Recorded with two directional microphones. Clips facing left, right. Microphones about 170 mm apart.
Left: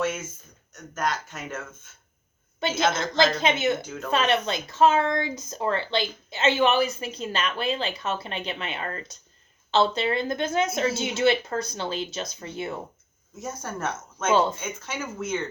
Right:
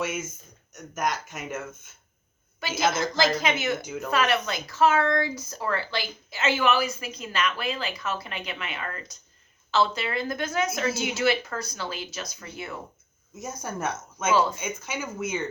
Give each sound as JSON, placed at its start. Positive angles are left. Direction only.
{"t": 0.0, "sound": "speech", "side_deg": -10}
{"t": 2.8, "sound": "speech", "side_deg": 25}
{"t": 13.4, "sound": "speech", "side_deg": -10}